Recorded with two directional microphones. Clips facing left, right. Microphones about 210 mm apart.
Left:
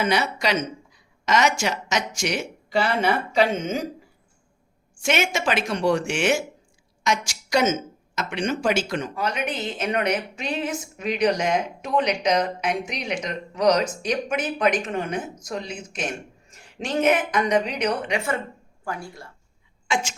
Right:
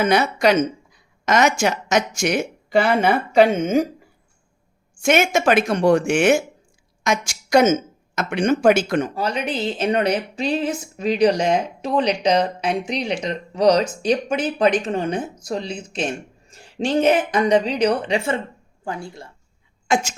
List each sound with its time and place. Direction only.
0.0 s speech: 50° right (ahead or behind)
5.0 s speech: 50° right (ahead or behind)
9.1 s speech: 30° right (ahead or behind)
19.9 s speech: 45° right (ahead or behind)